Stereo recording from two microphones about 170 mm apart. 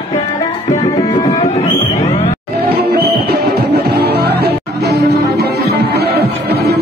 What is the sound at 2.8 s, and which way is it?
Music, 70° right (ahead or behind).